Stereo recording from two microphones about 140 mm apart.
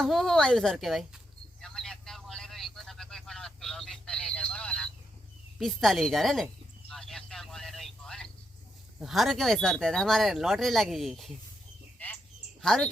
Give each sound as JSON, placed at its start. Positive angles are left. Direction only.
{"t": 0.0, "sound": "speech", "side_deg": 0}
{"t": 1.6, "sound": "vehicle", "side_deg": 5}
{"t": 5.5, "sound": "a sound", "side_deg": 0}
{"t": 9.0, "sound": "speech", "side_deg": 0}
{"t": 12.6, "sound": "speech", "side_deg": 5}